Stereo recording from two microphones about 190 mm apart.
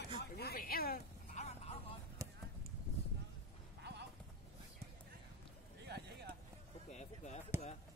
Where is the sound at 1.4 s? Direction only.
35° left (ahead or behind).